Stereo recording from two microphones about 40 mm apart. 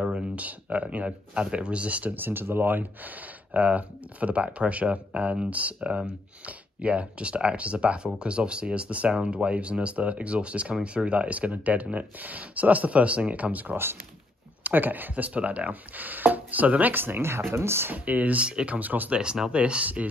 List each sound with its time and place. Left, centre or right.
0.4 s speech: right
2.0 s speech: right
15.2 s speech: right
15.7 s speech: right
16.9 s speech: right
17.9 s speech: right
19.5 s speech: right